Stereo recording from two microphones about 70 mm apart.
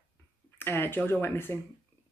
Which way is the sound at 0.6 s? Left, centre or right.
Left.